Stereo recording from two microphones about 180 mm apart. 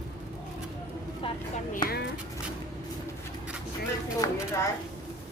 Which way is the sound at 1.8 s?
25° left (ahead or behind).